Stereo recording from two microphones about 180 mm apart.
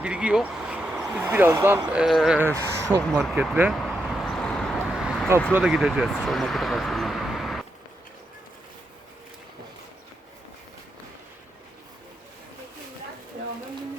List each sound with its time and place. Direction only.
0.0 s speech: 5° right (ahead or behind)
3.3 s speech: 10° right (ahead or behind)
3.8 s vehicle: centre (ahead or behind)
5.5 s speech: 5° right (ahead or behind)